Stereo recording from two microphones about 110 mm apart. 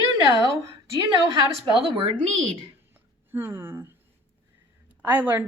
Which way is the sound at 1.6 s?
50° right (ahead or behind).